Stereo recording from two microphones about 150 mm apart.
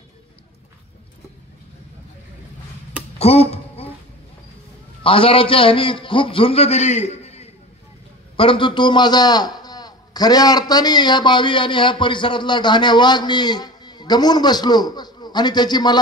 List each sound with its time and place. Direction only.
3.2 s finger snapping: 45° left (ahead or behind)
5.0 s a man's voice: 35° left (ahead or behind)
8.4 s a man's voice: 35° left (ahead or behind)